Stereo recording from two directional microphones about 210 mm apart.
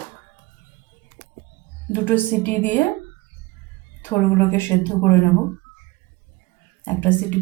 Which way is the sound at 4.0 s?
10° left (ahead or behind).